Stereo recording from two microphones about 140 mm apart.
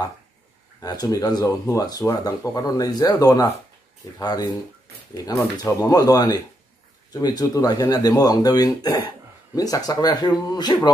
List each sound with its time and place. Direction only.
0.7 s speech: 25° left (ahead or behind)